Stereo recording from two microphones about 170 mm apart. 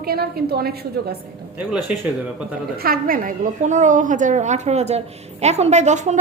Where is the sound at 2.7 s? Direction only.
60° right (ahead or behind).